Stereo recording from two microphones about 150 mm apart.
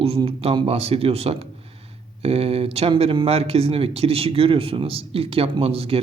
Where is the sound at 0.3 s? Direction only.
40° right (ahead or behind).